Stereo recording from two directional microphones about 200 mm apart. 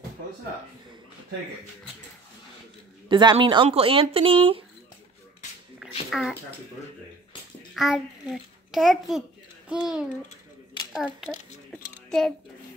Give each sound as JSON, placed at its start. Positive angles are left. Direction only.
{"t": 3.1, "sound": "speech", "side_deg": -25}
{"t": 6.0, "sound": "speech", "side_deg": 0}
{"t": 7.7, "sound": "a child's voice", "side_deg": 0}
{"t": 11.7, "sound": "a sound", "side_deg": 5}